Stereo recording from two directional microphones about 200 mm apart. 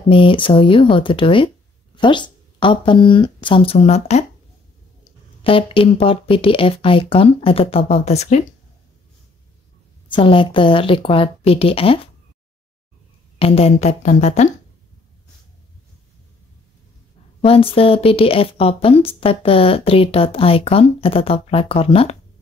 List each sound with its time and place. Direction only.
0.1 s speech: 25° left (ahead or behind)
5.4 s speech: 25° left (ahead or behind)
10.1 s speech: 25° left (ahead or behind)
13.4 s speech: 30° left (ahead or behind)
17.5 s speech: 30° left (ahead or behind)